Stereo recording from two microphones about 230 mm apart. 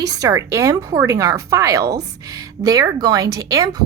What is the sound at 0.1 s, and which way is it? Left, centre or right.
A woman's voice, centre.